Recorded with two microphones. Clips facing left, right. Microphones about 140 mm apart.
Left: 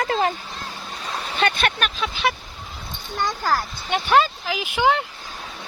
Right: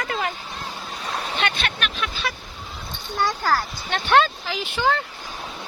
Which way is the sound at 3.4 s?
15° left (ahead or behind).